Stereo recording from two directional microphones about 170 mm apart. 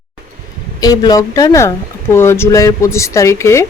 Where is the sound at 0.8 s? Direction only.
20° left (ahead or behind).